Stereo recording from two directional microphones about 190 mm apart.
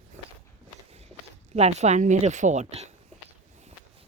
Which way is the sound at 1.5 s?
35° right (ahead or behind).